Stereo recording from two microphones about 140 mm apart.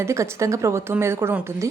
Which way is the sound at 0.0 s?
20° right (ahead or behind).